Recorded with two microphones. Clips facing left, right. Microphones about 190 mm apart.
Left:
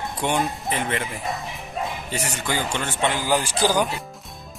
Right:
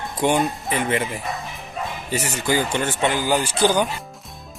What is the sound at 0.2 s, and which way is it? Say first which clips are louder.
A man's voice: right 5 dB; centre (ahead or behind).